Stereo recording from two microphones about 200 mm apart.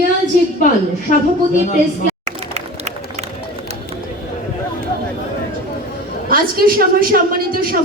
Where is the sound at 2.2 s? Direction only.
35° right (ahead or behind).